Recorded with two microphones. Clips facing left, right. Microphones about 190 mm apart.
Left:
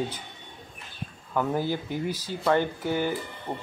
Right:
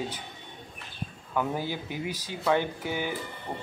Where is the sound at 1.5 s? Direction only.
15° right (ahead or behind).